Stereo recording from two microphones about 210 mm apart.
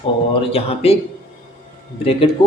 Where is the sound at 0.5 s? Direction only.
30° left (ahead or behind).